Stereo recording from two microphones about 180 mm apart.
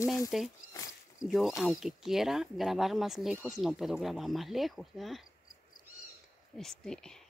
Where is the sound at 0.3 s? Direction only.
Centre (ahead or behind).